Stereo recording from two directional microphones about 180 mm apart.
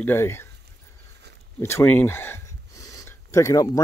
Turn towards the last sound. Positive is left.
turn(degrees=20)  # may be behind; listen again after turning